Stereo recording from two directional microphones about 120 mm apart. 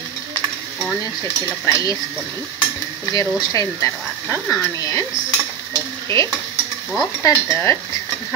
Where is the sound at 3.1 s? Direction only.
30° left (ahead or behind).